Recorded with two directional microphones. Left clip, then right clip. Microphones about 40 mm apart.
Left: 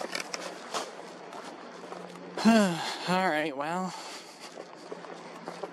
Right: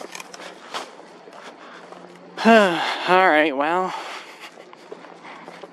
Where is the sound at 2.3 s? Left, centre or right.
Right.